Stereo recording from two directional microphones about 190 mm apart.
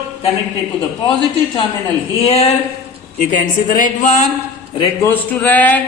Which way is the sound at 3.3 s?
45° left (ahead or behind).